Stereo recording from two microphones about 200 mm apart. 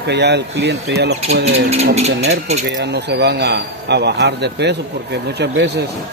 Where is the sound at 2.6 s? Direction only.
60° right (ahead or behind).